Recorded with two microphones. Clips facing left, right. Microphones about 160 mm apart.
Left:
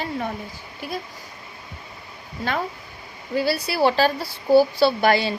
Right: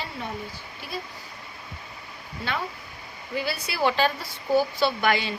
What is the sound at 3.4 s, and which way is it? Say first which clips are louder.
A woman's voice: left 6 dB; 35° left (ahead or behind).